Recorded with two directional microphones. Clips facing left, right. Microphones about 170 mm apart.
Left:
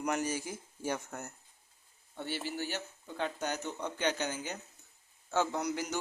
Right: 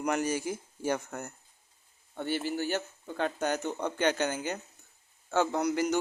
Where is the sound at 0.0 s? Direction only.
65° right (ahead or behind).